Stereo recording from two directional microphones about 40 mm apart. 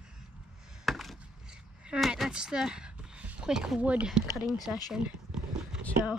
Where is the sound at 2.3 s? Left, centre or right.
Right.